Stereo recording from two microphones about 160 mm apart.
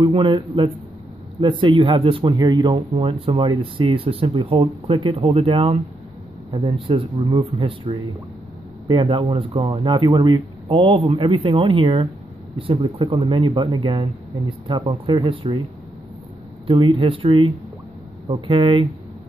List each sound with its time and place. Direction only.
0.0 s speech: 30° right (ahead or behind)
2.7 s speech: 40° right (ahead or behind)
15.2 s speech: 30° right (ahead or behind)
16.6 s speech: 35° right (ahead or behind)